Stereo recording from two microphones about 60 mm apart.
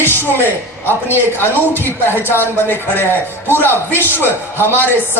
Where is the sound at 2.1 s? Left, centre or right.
Right.